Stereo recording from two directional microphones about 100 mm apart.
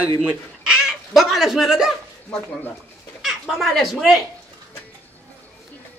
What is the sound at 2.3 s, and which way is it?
Speech, 20° left (ahead or behind).